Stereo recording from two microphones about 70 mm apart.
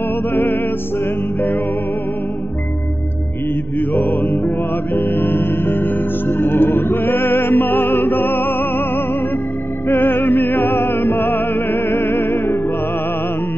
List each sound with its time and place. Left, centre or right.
0.3 s music: left
3.9 s music: centre